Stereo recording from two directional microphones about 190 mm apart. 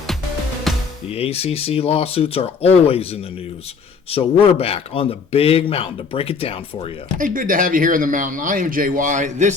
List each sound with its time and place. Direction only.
0.7 s music: centre (ahead or behind)
1.1 s speech: 30° left (ahead or behind)
7.2 s speech: 45° right (ahead or behind)